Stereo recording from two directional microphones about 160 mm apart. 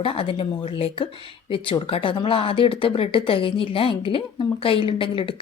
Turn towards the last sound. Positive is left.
turn(degrees=35)  # may be behind; listen again after turning